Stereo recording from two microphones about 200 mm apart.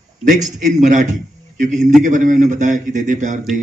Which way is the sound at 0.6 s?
40° right (ahead or behind).